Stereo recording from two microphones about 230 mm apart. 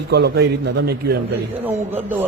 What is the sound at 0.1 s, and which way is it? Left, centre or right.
A man's voice, right.